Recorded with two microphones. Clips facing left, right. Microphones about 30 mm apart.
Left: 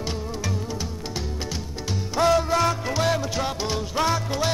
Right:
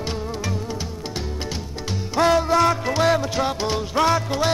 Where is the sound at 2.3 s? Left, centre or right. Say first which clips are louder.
Right 4 dB; right.